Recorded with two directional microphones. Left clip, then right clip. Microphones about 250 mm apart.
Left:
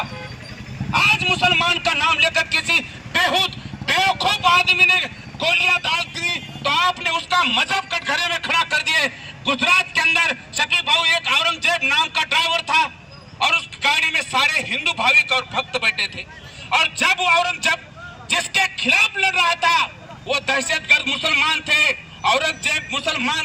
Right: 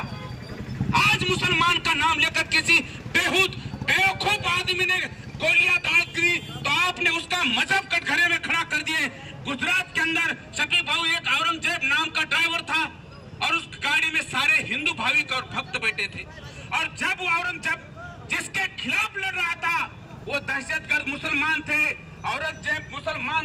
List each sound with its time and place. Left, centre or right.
0.9 s a man's voice: centre